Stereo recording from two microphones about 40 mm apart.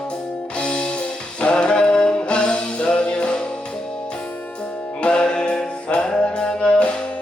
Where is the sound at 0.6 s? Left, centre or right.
Left.